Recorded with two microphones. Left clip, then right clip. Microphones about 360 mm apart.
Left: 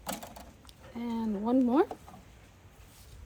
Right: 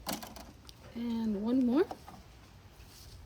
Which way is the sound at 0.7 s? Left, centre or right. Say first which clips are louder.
Left 1 dB; centre.